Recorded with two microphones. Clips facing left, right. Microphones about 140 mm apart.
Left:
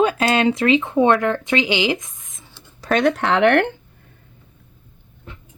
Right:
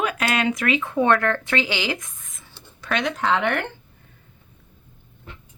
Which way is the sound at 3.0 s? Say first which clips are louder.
Left 6 dB; 65° left (ahead or behind).